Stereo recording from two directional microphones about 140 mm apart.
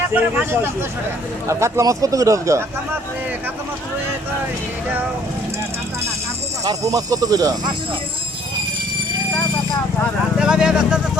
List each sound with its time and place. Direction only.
0.1 s speech: 15° right (ahead or behind)
6.7 s speech: 25° right (ahead or behind)
10.3 s speech: 5° right (ahead or behind)